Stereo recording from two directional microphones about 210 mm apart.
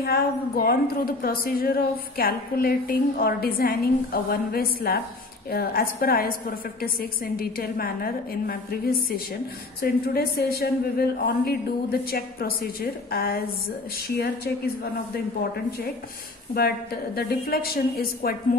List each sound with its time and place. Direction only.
0.0 s a woman's voice: 45° left (ahead or behind)
9.8 s a woman's voice: 45° left (ahead or behind)
16.5 s a woman's voice: 45° left (ahead or behind)